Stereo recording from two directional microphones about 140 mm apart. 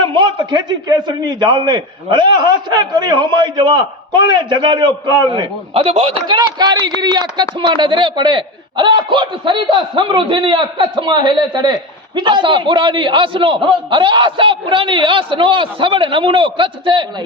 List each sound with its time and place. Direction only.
0.0 s a man's voice: 35° right (ahead or behind)